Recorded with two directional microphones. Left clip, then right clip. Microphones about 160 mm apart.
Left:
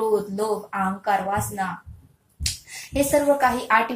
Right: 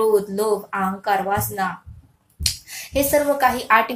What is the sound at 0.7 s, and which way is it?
Speech, 30° right (ahead or behind).